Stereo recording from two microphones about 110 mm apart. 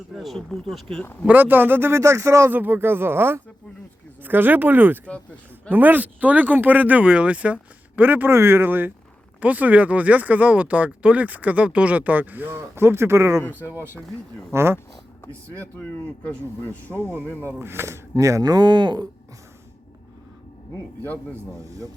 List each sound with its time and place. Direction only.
0.1 s speech: centre (ahead or behind)
1.3 s speech: 15° right (ahead or behind)
13.4 s speech: 20° left (ahead or behind)
14.5 s speech: 20° right (ahead or behind)
15.3 s speech: 15° left (ahead or behind)
16.9 s speech: 20° right (ahead or behind); by 19.0 s 45° right (ahead or behind)